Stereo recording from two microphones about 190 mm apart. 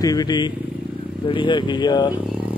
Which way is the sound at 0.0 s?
20° left (ahead or behind).